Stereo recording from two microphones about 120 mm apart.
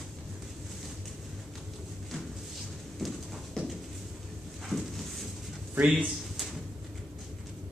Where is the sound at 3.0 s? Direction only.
Centre (ahead or behind).